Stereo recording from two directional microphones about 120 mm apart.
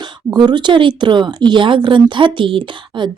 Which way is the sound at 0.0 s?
40° right (ahead or behind).